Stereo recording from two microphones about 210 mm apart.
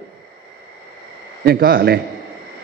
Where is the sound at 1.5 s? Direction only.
45° right (ahead or behind).